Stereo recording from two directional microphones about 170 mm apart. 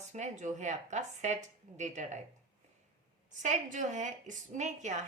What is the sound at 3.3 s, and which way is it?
Speech, 45° right (ahead or behind).